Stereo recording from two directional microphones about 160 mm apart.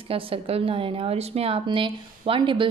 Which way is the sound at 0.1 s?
35° right (ahead or behind).